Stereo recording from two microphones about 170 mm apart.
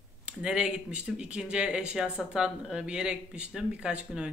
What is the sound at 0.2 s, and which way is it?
Speech, 5° right (ahead or behind).